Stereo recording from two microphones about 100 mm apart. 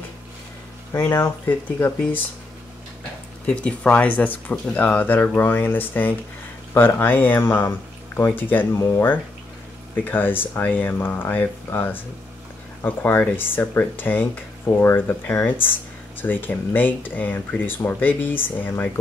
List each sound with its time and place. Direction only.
0.9 s speech: 25° left (ahead or behind)
3.4 s speech: 15° left (ahead or behind)